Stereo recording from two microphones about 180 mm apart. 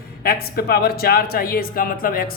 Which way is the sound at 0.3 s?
55° left (ahead or behind).